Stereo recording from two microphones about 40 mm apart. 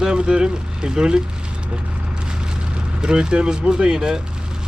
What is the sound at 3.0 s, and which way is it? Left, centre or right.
Speech, right.